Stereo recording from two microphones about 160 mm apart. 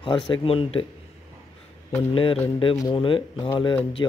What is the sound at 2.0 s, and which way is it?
A man's voice, 35° left (ahead or behind).